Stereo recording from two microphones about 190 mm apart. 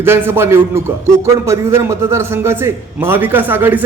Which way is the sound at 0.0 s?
10° right (ahead or behind).